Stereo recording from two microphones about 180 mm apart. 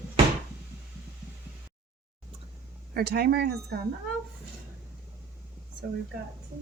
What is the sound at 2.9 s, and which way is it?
Speech, 60° right (ahead or behind).